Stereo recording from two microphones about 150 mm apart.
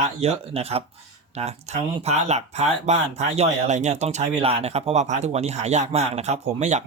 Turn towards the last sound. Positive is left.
turn(degrees=-50)  # may be behind; listen again after turning